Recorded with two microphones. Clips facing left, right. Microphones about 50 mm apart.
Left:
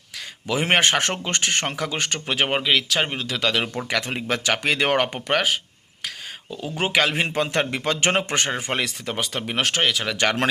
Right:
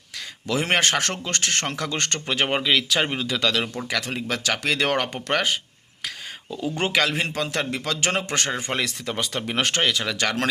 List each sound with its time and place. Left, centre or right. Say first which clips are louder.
0.4 s speech: left 2 dB; centre
3.5 s speech: left 2 dB; left
5.3 s speech: right 1 dB; centre
7.1 s a man's voice: left 3 dB; left
8.3 s speech: left 2 dB; left
8.9 s speech: even; centre
10.1 s speech: left 2 dB; left